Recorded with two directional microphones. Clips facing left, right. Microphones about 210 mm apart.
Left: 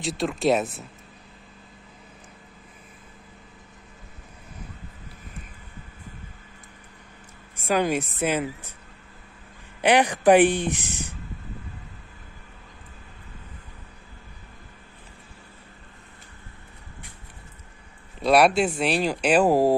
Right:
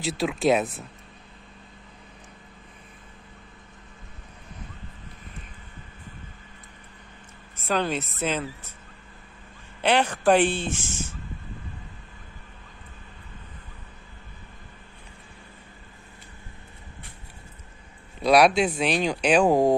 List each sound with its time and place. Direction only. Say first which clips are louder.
0.0 s speech: even; centre (ahead or behind)
7.6 s speech: left 3 dB; 10° left (ahead or behind)
9.8 s speech: left 3 dB; 15° left (ahead or behind)
18.2 s speech: even; 5° left (ahead or behind)